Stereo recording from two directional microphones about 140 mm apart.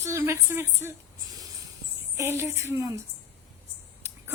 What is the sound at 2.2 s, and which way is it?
Speech, 20° right (ahead or behind).